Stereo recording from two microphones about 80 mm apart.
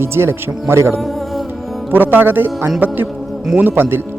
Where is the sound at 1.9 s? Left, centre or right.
Right.